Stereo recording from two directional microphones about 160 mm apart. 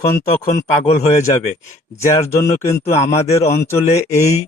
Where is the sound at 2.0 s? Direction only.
15° left (ahead or behind).